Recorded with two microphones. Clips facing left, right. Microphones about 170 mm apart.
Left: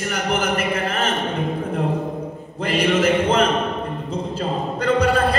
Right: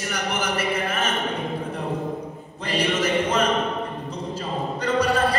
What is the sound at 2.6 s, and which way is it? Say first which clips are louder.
Music: left 5 dB; 55° left (ahead or behind).